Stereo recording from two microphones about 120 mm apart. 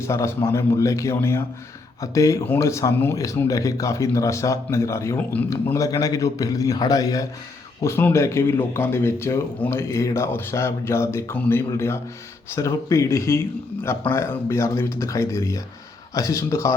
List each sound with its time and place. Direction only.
0.0 s speech: 25° left (ahead or behind)